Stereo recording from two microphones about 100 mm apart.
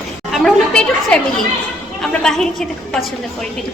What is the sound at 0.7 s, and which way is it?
A woman's voice, 10° left (ahead or behind).